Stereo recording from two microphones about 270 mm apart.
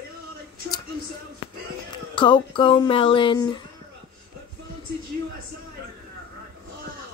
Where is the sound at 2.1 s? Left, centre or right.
Centre.